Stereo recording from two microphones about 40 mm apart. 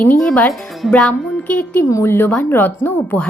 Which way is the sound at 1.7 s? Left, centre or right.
Left.